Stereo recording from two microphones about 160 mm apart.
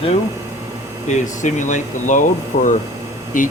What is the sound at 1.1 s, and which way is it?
Speech, 50° left (ahead or behind).